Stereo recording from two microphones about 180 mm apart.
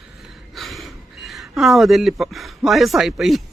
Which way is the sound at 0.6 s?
Centre (ahead or behind).